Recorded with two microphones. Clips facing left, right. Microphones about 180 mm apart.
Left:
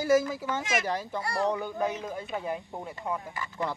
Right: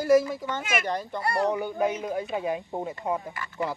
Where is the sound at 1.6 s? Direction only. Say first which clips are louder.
Right 4 dB; 15° right (ahead or behind).